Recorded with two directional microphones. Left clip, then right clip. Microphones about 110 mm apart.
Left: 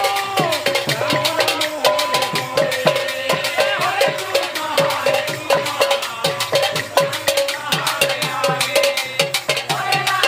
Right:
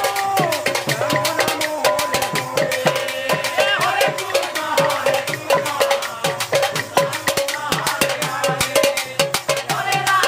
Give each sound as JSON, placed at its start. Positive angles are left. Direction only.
{"t": 0.7, "sound": "music", "side_deg": -30}
{"t": 3.5, "sound": "music", "side_deg": -45}
{"t": 4.0, "sound": "music", "side_deg": -35}
{"t": 8.4, "sound": "music", "side_deg": -30}